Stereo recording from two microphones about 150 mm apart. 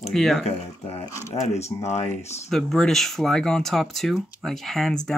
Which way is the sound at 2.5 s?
5° left (ahead or behind).